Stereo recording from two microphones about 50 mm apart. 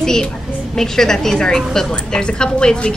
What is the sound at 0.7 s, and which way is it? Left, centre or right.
A woman's voice, centre.